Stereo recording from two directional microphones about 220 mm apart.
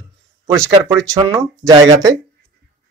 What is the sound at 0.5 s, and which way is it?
Speech, 10° right (ahead or behind).